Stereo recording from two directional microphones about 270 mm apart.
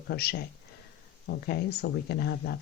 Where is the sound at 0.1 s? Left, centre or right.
Left.